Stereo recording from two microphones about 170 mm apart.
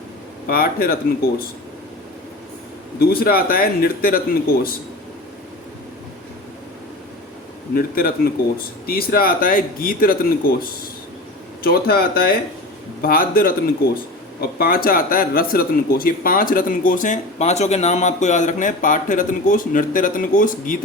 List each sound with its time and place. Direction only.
0.4 s speech: 60° left (ahead or behind)
3.0 s speech: 60° left (ahead or behind)
7.8 s speech: 60° left (ahead or behind)
14.6 s speech: 60° left (ahead or behind)